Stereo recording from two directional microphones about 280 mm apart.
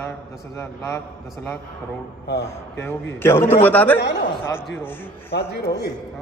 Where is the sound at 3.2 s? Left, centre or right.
Centre.